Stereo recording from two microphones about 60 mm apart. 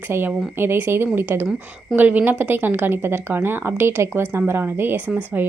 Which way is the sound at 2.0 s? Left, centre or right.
Right.